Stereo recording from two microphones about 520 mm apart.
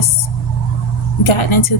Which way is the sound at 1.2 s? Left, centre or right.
Left.